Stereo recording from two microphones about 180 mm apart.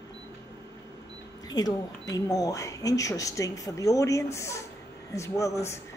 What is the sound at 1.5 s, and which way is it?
Speech, 20° left (ahead or behind).